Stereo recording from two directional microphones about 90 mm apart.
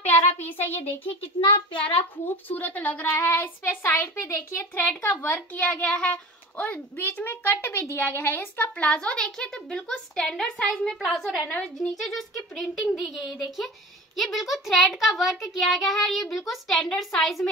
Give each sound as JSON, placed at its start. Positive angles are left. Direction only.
{"t": 0.4, "sound": "speech", "side_deg": 20}
{"t": 1.0, "sound": "a child's voice", "side_deg": 85}
{"t": 2.0, "sound": "speech", "side_deg": 20}
{"t": 8.7, "sound": "a child's voice", "side_deg": 15}